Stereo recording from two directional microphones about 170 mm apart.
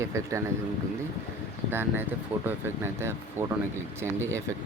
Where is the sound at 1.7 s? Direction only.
10° right (ahead or behind).